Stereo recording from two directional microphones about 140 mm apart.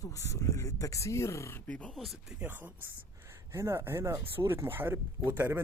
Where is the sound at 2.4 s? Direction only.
15° right (ahead or behind).